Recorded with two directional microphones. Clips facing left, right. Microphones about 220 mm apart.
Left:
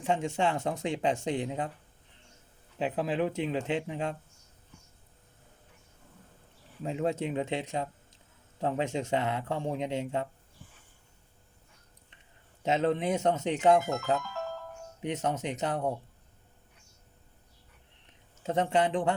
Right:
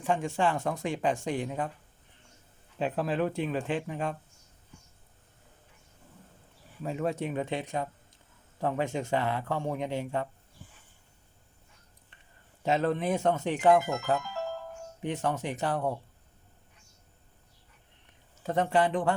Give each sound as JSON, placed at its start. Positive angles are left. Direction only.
{"t": 0.0, "sound": "speech", "side_deg": 20}
{"t": 2.7, "sound": "speech", "side_deg": 15}
{"t": 6.8, "sound": "speech", "side_deg": 20}
{"t": 12.6, "sound": "speech", "side_deg": 20}
{"t": 15.0, "sound": "speech", "side_deg": 20}
{"t": 18.4, "sound": "speech", "side_deg": 20}